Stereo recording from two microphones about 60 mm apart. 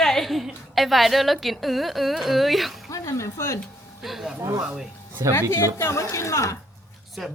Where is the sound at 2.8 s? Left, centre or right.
Left.